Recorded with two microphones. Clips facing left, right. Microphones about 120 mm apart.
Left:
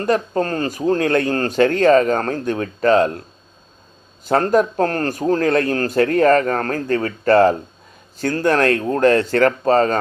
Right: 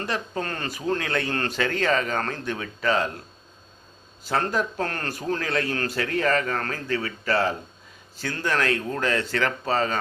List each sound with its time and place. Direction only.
0.0 s speech: 45° left (ahead or behind)
4.3 s speech: 45° left (ahead or behind)